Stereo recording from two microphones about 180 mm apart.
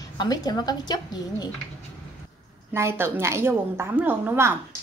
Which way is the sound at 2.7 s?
15° right (ahead or behind).